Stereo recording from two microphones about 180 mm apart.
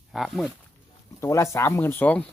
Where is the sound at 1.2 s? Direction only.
15° left (ahead or behind).